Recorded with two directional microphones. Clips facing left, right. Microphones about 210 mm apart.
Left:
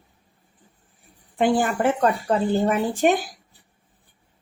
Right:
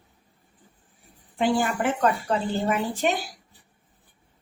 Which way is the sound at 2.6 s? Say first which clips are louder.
Left 5 dB; 50° left (ahead or behind).